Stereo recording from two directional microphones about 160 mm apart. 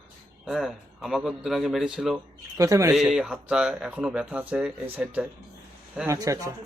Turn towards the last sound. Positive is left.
turn(degrees=-20)  # may be behind; listen again after turning